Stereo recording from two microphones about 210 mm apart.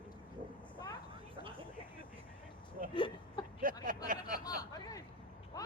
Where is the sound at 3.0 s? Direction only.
25° left (ahead or behind).